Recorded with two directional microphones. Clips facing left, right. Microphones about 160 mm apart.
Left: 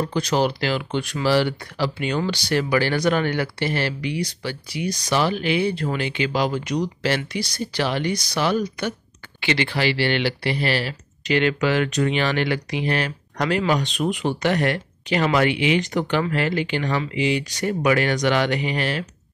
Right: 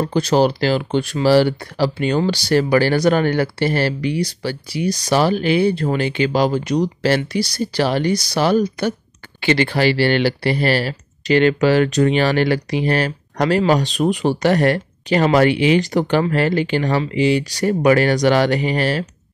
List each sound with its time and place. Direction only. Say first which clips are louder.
0.0 s speech: right 5 dB; 35° right (ahead or behind)